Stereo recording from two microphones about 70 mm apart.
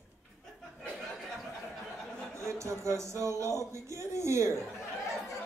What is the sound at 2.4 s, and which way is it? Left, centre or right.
A man's voice, right.